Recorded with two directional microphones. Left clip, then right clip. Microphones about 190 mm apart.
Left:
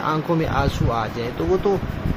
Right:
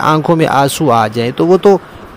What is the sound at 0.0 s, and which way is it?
Speech, 65° right (ahead or behind).